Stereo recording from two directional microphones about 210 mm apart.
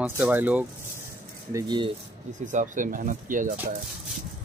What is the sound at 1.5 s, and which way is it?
Speech, 20° right (ahead or behind).